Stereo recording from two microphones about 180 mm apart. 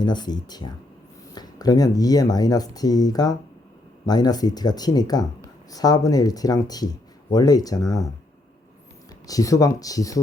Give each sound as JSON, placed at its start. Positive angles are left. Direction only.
{"t": 0.0, "sound": "speech", "side_deg": 25}
{"t": 9.2, "sound": "speech", "side_deg": 20}